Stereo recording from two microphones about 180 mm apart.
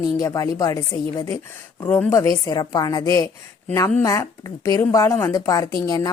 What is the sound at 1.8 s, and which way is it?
A woman's voice, 10° left (ahead or behind).